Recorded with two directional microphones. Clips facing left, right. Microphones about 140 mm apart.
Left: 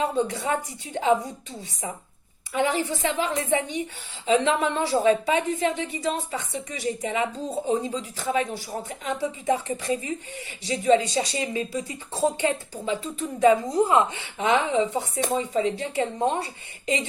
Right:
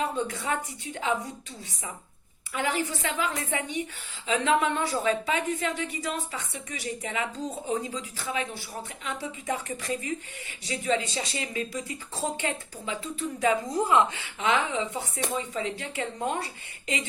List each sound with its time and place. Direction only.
0.2 s a woman's voice: 30° left (ahead or behind)
2.5 s a woman's voice: 35° left (ahead or behind)